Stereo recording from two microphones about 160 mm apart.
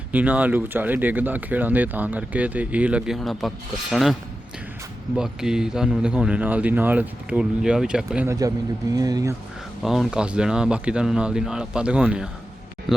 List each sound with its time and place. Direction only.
0.1 s speech: 10° right (ahead or behind)
8.3 s speech: 20° right (ahead or behind)
9.8 s speech: centre (ahead or behind)